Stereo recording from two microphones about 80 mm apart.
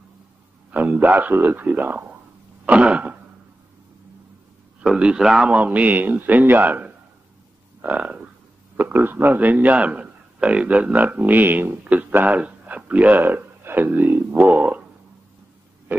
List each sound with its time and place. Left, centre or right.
0.7 s a man's voice: centre
2.6 s throat clearing: centre
4.8 s a man's voice: centre